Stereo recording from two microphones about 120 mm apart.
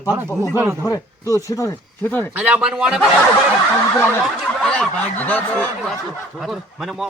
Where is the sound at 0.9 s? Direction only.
30° left (ahead or behind).